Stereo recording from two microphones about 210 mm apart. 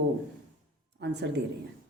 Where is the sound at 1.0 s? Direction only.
55° right (ahead or behind).